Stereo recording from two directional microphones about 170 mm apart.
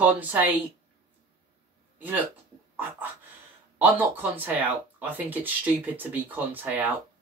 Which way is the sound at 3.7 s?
10° right (ahead or behind).